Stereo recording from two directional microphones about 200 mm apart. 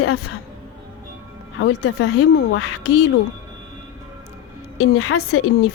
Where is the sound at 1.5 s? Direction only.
90° left.